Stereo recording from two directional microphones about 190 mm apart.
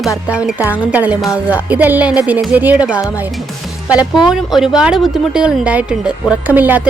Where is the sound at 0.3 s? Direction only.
5° right (ahead or behind).